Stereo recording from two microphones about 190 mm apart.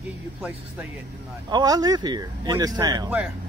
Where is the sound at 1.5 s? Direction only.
20° right (ahead or behind).